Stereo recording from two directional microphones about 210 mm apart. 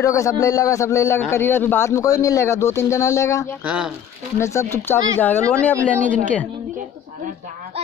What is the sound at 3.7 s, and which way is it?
Speech, 5° right (ahead or behind).